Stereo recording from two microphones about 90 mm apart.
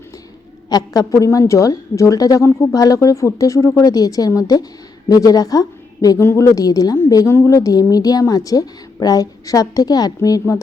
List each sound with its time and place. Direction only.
0.7 s a woman's voice: 45° left (ahead or behind)
6.1 s a woman's voice: 30° left (ahead or behind)
7.3 s a woman's voice: 30° left (ahead or behind)